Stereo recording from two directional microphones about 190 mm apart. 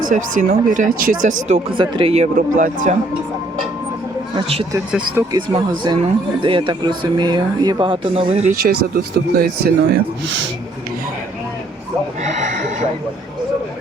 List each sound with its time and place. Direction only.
0.1 s speech: 40° right (ahead or behind)
1.5 s speech: 25° right (ahead or behind)
2.3 s speech: 40° right (ahead or behind)
4.4 s speech: 30° right (ahead or behind)
4.9 s speech: 5° right (ahead or behind)
5.3 s speech: 20° right (ahead or behind)
8.5 s speech: 50° right (ahead or behind)